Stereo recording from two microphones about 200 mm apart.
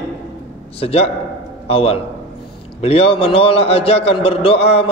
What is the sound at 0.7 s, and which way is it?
A man's voice, 30° left (ahead or behind).